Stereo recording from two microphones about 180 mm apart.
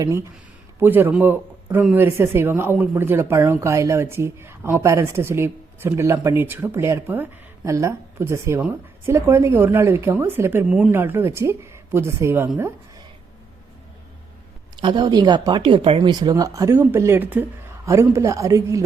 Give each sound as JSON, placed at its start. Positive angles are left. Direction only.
{"t": 0.8, "sound": "speech", "side_deg": -10}
{"t": 14.8, "sound": "speech", "side_deg": -25}